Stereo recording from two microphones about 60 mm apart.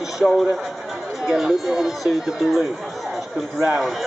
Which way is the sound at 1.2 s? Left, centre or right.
Centre.